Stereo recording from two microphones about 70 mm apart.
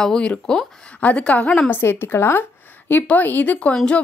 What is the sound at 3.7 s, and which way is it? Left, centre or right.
Speech, centre.